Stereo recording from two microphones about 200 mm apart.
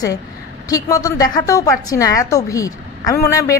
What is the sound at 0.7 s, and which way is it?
A woman's voice, 15° left (ahead or behind).